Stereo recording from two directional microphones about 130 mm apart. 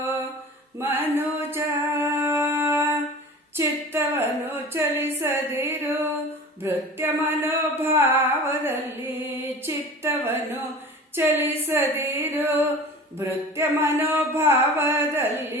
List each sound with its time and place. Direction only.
0.8 s music: 15° right (ahead or behind)
3.6 s a sound: 15° right (ahead or behind)
11.1 s female singing: 15° right (ahead or behind)
13.1 s music: 20° right (ahead or behind)